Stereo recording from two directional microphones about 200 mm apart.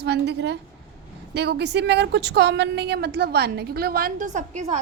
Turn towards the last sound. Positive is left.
turn(degrees=-35)  # may be behind; listen again after turning